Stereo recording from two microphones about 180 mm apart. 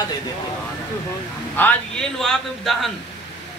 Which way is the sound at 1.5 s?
10° left (ahead or behind).